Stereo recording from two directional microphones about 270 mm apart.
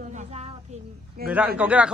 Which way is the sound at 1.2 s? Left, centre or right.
Right.